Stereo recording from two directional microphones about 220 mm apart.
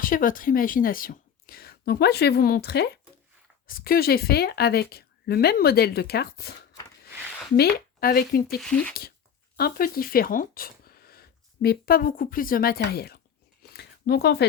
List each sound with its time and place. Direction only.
0.0 s speech: 40° left (ahead or behind)
7.5 s speech: 45° left (ahead or behind)
8.6 s speech: 5° left (ahead or behind)
9.6 s speech: 40° left (ahead or behind)